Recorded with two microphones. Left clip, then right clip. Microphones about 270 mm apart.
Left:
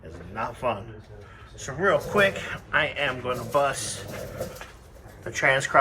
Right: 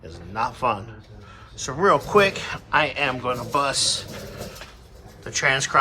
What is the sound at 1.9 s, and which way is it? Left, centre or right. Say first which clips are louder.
Speech: right 4 dB; centre.